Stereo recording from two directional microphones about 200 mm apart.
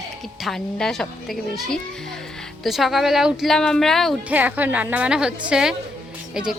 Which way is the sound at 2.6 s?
Centre (ahead or behind).